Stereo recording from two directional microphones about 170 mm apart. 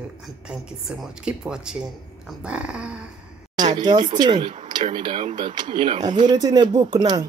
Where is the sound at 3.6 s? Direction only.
25° right (ahead or behind).